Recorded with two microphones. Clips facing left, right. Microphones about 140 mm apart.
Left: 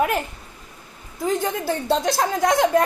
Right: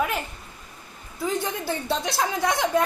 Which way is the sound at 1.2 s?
45° left (ahead or behind).